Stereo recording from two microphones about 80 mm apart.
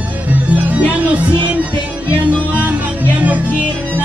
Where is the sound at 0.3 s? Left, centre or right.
Centre.